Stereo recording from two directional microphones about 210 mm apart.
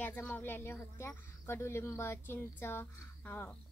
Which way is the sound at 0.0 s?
5° left (ahead or behind).